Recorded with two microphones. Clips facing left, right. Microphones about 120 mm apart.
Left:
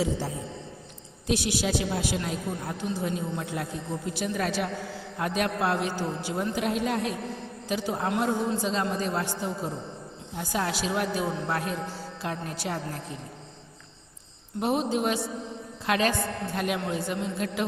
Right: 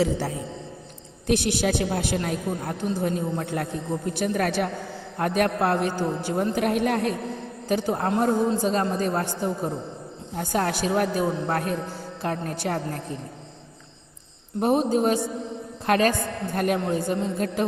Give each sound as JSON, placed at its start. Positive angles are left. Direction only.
{"t": 0.0, "sound": "a man's voice", "side_deg": -75}
{"t": 1.3, "sound": "a woman's voice", "side_deg": -55}
{"t": 8.1, "sound": "a woman's voice", "side_deg": -35}
{"t": 14.6, "sound": "a man's voice", "side_deg": -40}